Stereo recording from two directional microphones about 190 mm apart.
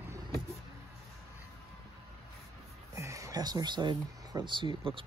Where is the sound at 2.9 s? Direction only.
15° right (ahead or behind).